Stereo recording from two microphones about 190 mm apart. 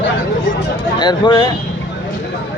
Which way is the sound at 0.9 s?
25° left (ahead or behind).